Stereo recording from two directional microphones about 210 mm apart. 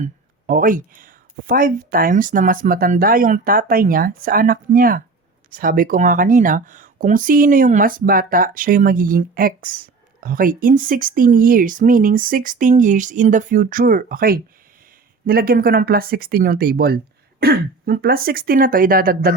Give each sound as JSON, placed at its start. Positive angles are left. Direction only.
{"t": 0.0, "sound": "speech", "side_deg": -40}